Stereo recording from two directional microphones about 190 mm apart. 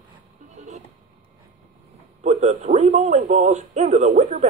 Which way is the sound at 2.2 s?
35° right (ahead or behind).